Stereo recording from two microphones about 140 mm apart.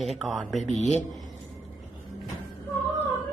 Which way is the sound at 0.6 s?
55° left (ahead or behind).